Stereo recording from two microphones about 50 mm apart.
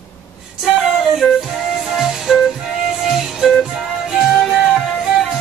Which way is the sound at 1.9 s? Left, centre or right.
Centre.